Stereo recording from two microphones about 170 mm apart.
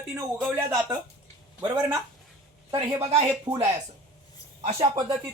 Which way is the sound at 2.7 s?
30° right (ahead or behind).